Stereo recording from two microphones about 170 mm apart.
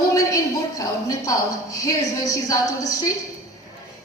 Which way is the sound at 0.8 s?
20° left (ahead or behind).